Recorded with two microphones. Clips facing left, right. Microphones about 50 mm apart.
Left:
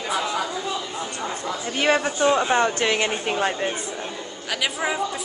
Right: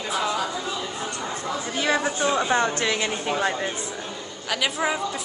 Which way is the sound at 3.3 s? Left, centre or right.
Centre.